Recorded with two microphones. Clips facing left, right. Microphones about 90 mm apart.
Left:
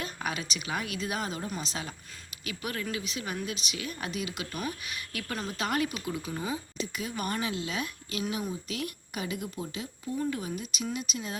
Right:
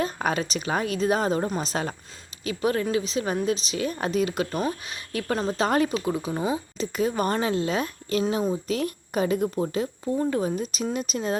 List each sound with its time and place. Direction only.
0.0 s speech: 40° right (ahead or behind)
2.4 s speech: 30° right (ahead or behind)
4.6 s speech: 30° right (ahead or behind)
6.7 s speech: 40° right (ahead or behind)